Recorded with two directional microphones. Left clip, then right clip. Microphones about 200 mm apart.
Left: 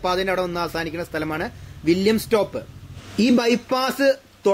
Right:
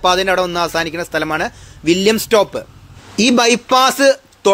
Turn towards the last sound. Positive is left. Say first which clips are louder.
# right 8 dB
turn(degrees=-10)  # may be behind; listen again after turning